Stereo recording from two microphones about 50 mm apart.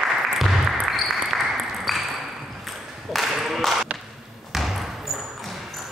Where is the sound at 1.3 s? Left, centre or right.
Centre.